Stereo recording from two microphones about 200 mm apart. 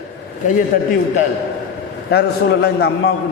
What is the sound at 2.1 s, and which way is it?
A man's voice, 55° left (ahead or behind).